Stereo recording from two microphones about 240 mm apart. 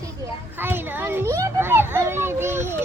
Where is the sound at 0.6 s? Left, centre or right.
Centre.